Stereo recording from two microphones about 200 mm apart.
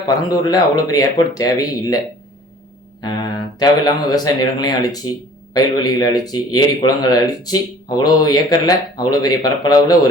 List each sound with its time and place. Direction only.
0.3 s speech: 20° left (ahead or behind)
3.6 s speech: 20° left (ahead or behind)